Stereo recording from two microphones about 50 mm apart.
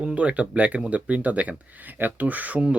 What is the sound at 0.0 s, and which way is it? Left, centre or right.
Speech, right.